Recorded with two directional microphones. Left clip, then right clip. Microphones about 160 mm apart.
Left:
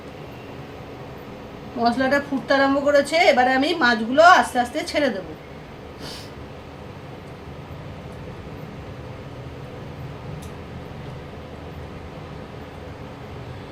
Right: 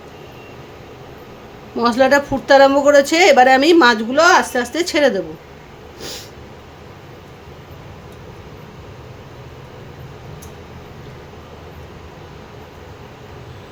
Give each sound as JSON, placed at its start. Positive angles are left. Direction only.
{"t": 1.8, "sound": "a woman's voice", "side_deg": -90}